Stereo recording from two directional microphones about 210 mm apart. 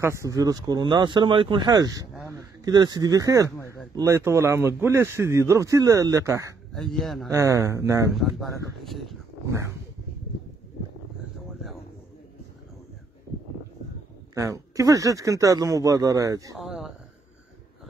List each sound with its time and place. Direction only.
0.0 s speech: 15° right (ahead or behind)
6.7 s speech: centre (ahead or behind)
7.2 s speech: 15° right (ahead or behind)
8.1 s speech: centre (ahead or behind)
14.3 s speech: 15° right (ahead or behind)
16.5 s speech: centre (ahead or behind)